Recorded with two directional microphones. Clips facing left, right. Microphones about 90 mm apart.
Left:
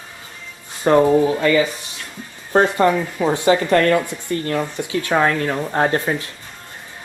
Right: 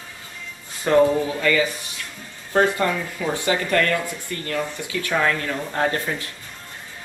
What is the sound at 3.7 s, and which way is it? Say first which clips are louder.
Speech: left 6 dB; 35° left (ahead or behind).